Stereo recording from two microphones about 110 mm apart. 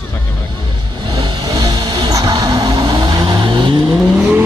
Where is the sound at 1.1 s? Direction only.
40° right (ahead or behind).